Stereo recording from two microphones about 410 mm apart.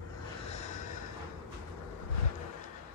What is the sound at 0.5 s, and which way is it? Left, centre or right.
Snort, centre.